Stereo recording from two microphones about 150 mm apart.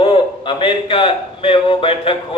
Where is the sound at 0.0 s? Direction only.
35° left (ahead or behind).